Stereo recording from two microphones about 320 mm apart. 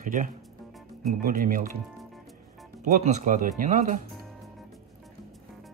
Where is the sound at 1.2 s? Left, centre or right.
Right.